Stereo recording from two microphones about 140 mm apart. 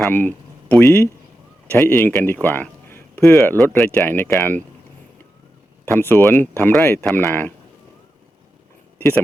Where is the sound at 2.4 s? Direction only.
15° left (ahead or behind).